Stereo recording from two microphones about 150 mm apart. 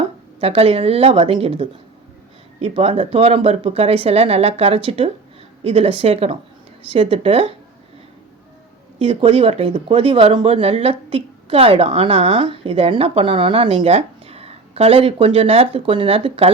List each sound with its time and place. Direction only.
0.3 s speech: 40° right (ahead or behind)
9.0 s speech: 35° right (ahead or behind)